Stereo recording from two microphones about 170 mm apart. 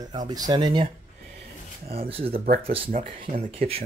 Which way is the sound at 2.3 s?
60° right (ahead or behind).